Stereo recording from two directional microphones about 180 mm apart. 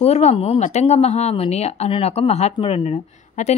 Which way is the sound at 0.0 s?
35° left (ahead or behind).